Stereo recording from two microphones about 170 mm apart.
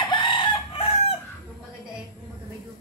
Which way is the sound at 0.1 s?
30° left (ahead or behind).